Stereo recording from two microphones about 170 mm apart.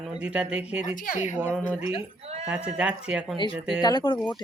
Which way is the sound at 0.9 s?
50° left (ahead or behind).